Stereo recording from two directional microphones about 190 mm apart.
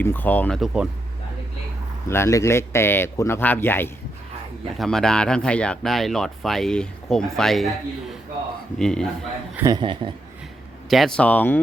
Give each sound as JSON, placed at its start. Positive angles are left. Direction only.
{"t": 0.0, "sound": "speech", "side_deg": 10}
{"t": 2.0, "sound": "speech", "side_deg": 15}
{"t": 8.8, "sound": "speech", "side_deg": 5}
{"t": 9.6, "sound": "speech", "side_deg": -20}
{"t": 10.8, "sound": "speech", "side_deg": 0}